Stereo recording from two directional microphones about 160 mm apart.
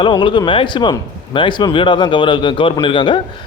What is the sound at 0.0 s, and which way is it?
A man's voice, 30° left (ahead or behind).